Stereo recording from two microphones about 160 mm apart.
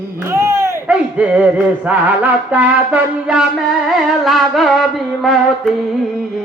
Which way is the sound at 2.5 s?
10° right (ahead or behind).